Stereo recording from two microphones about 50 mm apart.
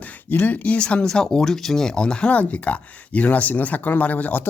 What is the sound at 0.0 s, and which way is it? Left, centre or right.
Speech, left.